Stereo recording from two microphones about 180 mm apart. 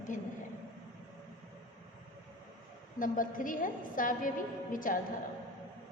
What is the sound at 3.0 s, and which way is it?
A woman's voice, 50° left (ahead or behind).